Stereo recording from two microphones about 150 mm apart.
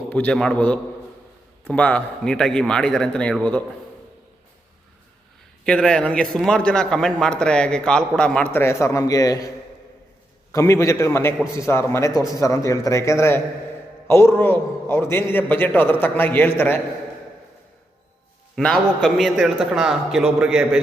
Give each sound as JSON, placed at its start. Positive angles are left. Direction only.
{"t": 0.1, "sound": "a man's voice", "side_deg": 10}
{"t": 5.6, "sound": "a man's voice", "side_deg": 5}
{"t": 10.5, "sound": "a man's voice", "side_deg": 20}
{"t": 18.5, "sound": "a man's voice", "side_deg": 0}